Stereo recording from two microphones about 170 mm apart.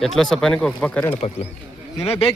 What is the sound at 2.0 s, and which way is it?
Speech, 35° left (ahead or behind).